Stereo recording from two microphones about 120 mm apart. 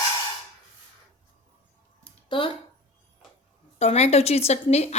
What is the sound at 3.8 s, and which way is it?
A woman's voice, 60° left (ahead or behind).